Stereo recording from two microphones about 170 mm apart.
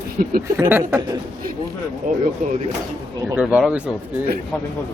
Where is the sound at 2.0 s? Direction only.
50° right (ahead or behind).